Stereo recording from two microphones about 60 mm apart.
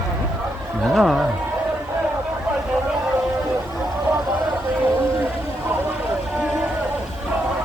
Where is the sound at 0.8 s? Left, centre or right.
Centre.